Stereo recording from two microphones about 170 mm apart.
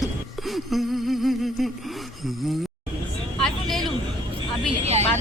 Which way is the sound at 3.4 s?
Centre (ahead or behind).